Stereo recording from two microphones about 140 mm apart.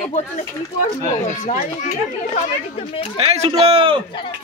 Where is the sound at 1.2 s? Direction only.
65° left (ahead or behind).